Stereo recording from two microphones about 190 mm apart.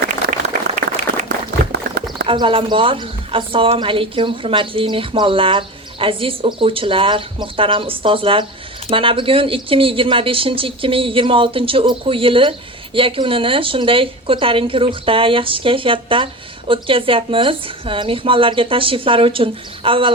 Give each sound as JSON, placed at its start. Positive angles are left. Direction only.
{"t": 1.1, "sound": "run", "side_deg": -55}
{"t": 2.2, "sound": "speech", "side_deg": -25}